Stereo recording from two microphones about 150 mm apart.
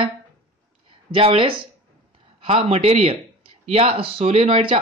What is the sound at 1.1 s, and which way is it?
Speech, 40° right (ahead or behind).